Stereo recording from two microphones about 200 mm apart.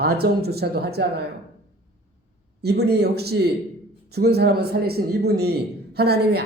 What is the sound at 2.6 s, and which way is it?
A man's voice, 55° right (ahead or behind).